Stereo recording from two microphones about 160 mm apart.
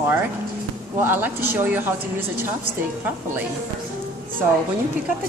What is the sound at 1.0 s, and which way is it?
Speech, 15° right (ahead or behind).